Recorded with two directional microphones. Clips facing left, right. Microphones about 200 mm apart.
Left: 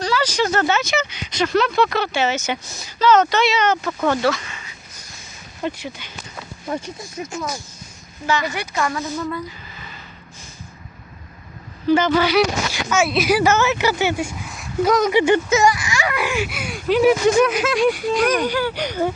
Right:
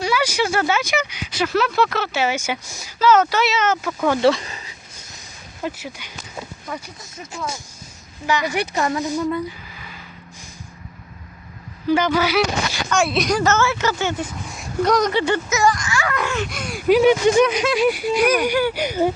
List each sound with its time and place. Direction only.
0.0 s speech: 10° right (ahead or behind)
4.2 s a sound: 30° right (ahead or behind)
5.6 s speech: 5° right (ahead or behind)
8.3 s a woman's voice: 15° right (ahead or behind)
11.9 s speech: 10° right (ahead or behind)
12.9 s speech: 5° left (ahead or behind)